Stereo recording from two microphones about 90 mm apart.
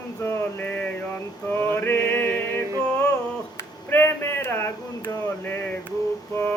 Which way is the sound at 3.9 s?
25° left (ahead or behind).